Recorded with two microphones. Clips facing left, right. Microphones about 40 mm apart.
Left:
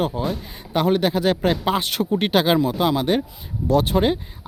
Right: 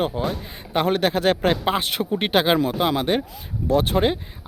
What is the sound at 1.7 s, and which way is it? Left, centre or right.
A man's voice, right.